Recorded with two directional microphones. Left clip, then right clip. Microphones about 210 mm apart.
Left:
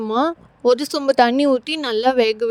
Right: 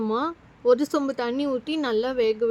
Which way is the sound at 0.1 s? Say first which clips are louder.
Left 7 dB; 30° left (ahead or behind).